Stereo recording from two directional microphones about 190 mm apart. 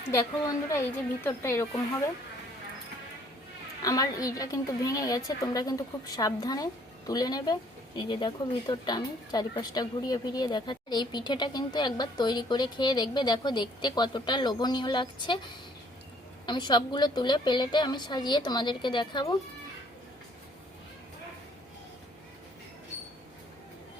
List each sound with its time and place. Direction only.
0.7 s speech: 10° left (ahead or behind)
3.8 s a woman's voice: 20° left (ahead or behind)
16.5 s a woman's voice: 25° left (ahead or behind)